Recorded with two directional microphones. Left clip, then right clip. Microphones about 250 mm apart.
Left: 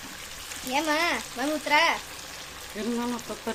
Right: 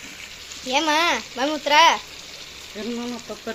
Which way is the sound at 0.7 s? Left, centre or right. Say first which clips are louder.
Right 6 dB; right.